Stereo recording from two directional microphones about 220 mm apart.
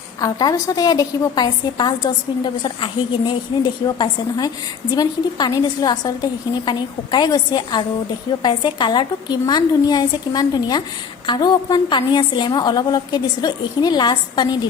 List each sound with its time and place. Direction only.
0.2 s a woman's voice: 15° left (ahead or behind)